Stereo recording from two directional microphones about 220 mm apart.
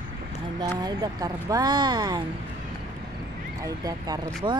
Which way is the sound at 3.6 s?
15° right (ahead or behind).